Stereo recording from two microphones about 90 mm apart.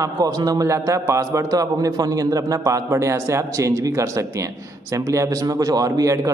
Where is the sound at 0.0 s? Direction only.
45° right (ahead or behind).